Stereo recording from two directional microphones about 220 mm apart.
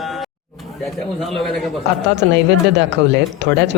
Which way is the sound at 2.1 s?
50° right (ahead or behind).